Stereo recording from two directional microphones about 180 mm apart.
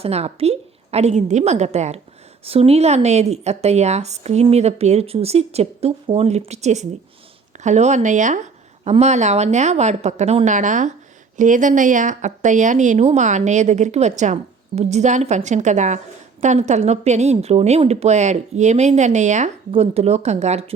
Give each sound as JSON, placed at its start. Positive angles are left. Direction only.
{"t": 0.0, "sound": "speech", "side_deg": -35}